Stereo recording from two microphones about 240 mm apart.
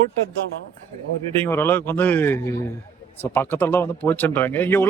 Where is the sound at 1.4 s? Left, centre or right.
Centre.